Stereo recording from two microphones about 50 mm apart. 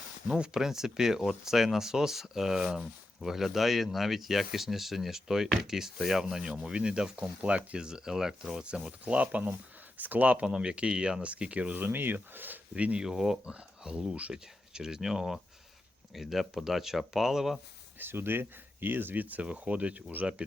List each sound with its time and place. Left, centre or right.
0.3 s speech: centre
8.6 s speech: right
10.4 s speech: centre
11.8 s speech: right
12.7 s speech: right
13.0 s speech: centre
13.4 s speech: centre
18.0 s speech: right